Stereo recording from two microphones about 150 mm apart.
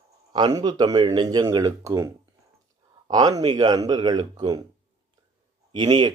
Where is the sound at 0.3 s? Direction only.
30° right (ahead or behind).